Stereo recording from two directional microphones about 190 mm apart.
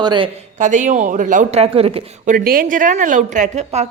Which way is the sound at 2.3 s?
50° right (ahead or behind).